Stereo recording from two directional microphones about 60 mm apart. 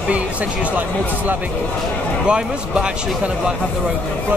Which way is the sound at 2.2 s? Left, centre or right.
Centre.